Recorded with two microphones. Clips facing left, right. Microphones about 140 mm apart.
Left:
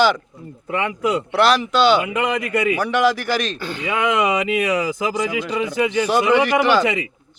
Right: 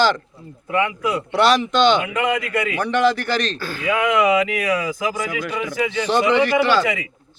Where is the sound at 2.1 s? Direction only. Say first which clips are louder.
Even; 20° left (ahead or behind).